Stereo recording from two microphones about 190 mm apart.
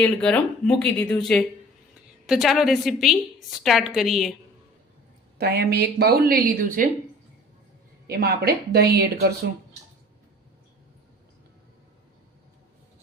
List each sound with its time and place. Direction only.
0.0 s speech: 5° left (ahead or behind)
5.4 s a woman's voice: 55° right (ahead or behind)
8.0 s a woman's voice: 55° right (ahead or behind)